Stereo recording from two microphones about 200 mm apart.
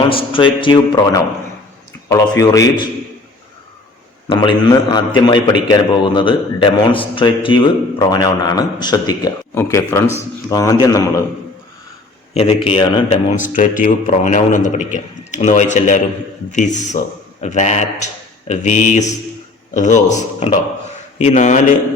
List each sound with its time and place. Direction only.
0.1 s a man's voice: 25° left (ahead or behind)
4.3 s a man's voice: 25° left (ahead or behind)
12.3 s a man's voice: 30° left (ahead or behind)
13.3 s speech: 40° left (ahead or behind)